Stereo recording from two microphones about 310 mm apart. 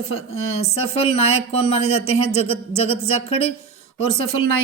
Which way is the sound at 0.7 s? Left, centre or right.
Centre.